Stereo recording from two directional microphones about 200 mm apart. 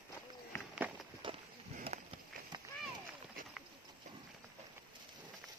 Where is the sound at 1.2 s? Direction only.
25° right (ahead or behind).